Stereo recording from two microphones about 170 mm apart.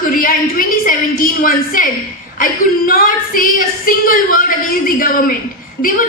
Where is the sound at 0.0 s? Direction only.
55° left (ahead or behind).